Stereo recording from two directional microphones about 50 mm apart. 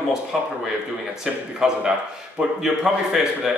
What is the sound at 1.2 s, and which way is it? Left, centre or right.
A man's voice, centre.